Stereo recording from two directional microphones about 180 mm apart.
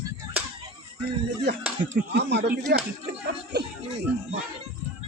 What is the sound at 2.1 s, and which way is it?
Speech, 65° right (ahead or behind).